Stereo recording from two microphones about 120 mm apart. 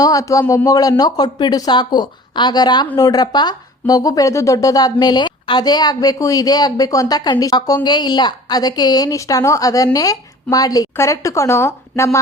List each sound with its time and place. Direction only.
0.0 s a woman's voice: 30° left (ahead or behind)